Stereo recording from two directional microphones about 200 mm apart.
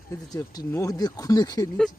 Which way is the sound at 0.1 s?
15° left (ahead or behind).